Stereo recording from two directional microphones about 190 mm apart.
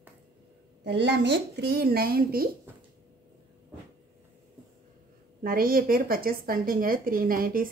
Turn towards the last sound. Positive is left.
turn(degrees=-50)  # may be behind; listen again after turning